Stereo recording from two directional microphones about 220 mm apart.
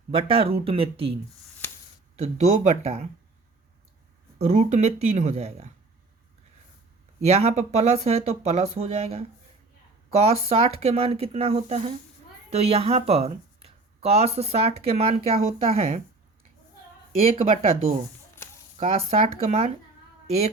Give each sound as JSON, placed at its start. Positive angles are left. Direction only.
{"t": 0.1, "sound": "speech", "side_deg": -25}
{"t": 2.1, "sound": "speech", "side_deg": -30}
{"t": 4.4, "sound": "speech", "side_deg": -30}
{"t": 7.2, "sound": "speech", "side_deg": -30}
{"t": 17.3, "sound": "speech", "side_deg": -25}